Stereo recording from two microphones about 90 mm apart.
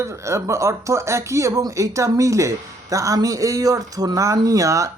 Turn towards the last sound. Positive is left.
turn(degrees=-35)  # may be behind; listen again after turning